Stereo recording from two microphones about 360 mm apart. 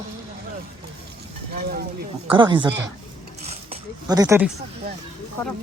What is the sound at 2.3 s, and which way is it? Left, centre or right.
Speech, centre.